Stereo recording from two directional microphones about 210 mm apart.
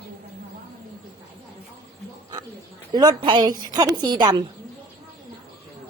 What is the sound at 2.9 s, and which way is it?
A woman's voice, 20° right (ahead or behind).